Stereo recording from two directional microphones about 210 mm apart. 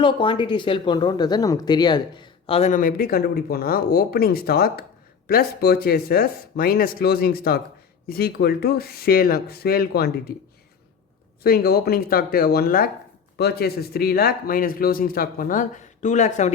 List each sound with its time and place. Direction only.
0.0 s speech: 25° left (ahead or behind); by 10.3 s 50° left (ahead or behind)
11.4 s speech: 45° left (ahead or behind)